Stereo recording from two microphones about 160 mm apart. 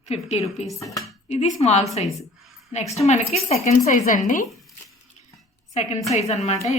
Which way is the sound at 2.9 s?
45° left (ahead or behind).